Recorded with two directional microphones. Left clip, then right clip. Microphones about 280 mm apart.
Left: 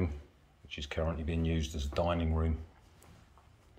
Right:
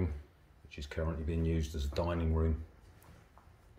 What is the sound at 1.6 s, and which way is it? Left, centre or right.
Speech, left.